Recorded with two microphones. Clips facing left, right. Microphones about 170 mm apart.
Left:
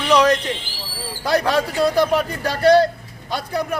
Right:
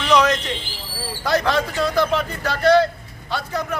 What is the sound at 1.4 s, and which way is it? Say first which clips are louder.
Speech: left 2 dB; 10° left (ahead or behind).